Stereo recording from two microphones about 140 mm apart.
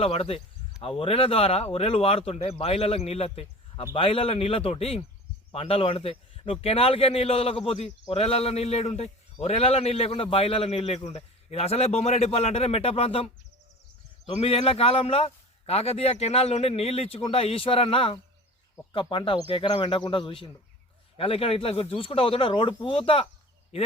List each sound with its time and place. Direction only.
0.0 s a man's voice: 45° left (ahead or behind)
14.3 s a man's voice: 45° left (ahead or behind)